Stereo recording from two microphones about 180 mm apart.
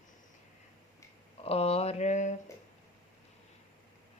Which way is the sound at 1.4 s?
35° left (ahead or behind).